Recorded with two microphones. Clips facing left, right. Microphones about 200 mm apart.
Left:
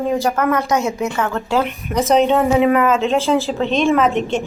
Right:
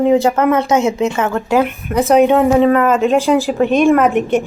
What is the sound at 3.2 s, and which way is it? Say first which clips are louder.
Speech: right 4 dB; 15° right (ahead or behind).